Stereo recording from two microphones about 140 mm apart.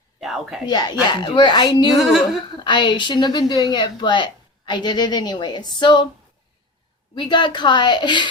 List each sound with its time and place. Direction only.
0.2 s speech: centre (ahead or behind)
0.6 s a woman's voice: 30° left (ahead or behind)
2.0 s speech: centre (ahead or behind)
2.6 s a woman's voice: 35° left (ahead or behind)
7.2 s a woman's voice: 35° left (ahead or behind)